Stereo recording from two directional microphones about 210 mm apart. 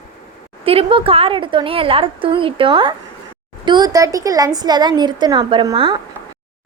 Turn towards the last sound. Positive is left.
turn(degrees=-25)  # may be behind; listen again after turning